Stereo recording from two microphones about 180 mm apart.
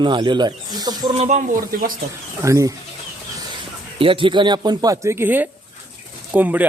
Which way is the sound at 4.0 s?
30° right (ahead or behind).